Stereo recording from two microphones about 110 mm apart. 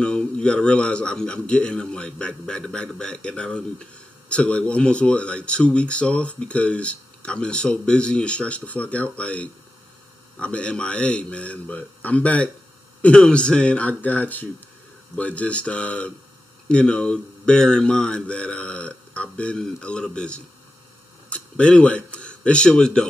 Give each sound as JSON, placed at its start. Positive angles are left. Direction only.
{"t": 0.0, "sound": "speech", "side_deg": 10}